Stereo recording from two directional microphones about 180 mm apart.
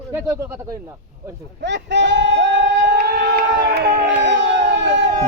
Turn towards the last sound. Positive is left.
turn(degrees=-75)  # may be behind; listen again after turning